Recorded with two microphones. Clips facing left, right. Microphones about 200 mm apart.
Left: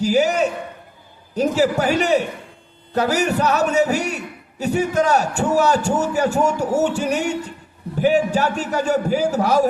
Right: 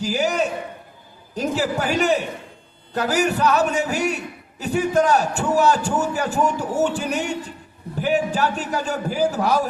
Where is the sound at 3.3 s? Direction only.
40° left (ahead or behind).